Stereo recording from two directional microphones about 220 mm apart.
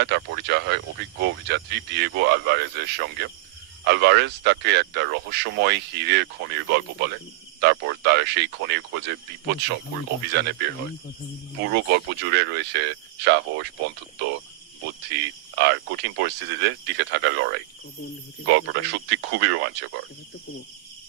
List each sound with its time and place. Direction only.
0.0 s speech: 50° right (ahead or behind)
11.6 s speech: 50° right (ahead or behind)
15.1 s speech: 50° right (ahead or behind)